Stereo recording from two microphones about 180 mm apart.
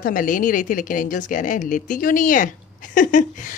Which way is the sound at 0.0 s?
50° left (ahead or behind).